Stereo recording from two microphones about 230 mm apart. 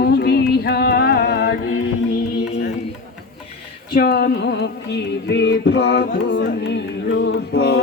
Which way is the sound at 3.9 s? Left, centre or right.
Left.